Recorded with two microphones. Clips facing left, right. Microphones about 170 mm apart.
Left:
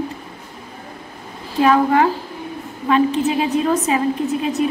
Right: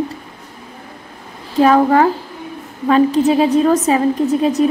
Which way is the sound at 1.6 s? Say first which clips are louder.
Right 3 dB; 40° right (ahead or behind).